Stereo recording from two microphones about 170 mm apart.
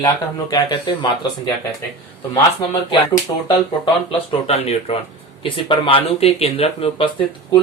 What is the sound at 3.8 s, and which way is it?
Speech, 35° left (ahead or behind).